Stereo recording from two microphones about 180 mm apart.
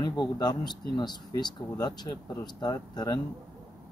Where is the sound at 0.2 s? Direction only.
25° left (ahead or behind).